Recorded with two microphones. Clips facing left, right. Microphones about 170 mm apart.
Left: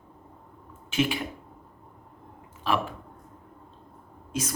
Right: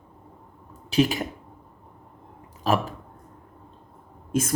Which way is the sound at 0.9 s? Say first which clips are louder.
Right 5 dB; 40° right (ahead or behind).